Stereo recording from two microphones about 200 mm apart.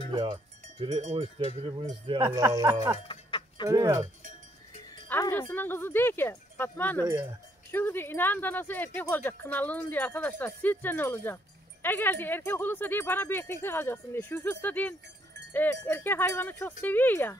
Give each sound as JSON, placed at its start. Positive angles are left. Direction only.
{"t": 0.1, "sound": "cowbell", "side_deg": -20}
{"t": 0.9, "sound": "speech", "side_deg": -30}
{"t": 3.1, "sound": "a sound", "side_deg": 25}
{"t": 3.6, "sound": "speech", "side_deg": -15}
{"t": 5.0, "sound": "speech", "side_deg": 10}